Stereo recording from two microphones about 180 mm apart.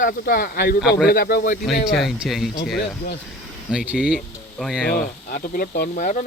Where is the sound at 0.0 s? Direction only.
55° left (ahead or behind).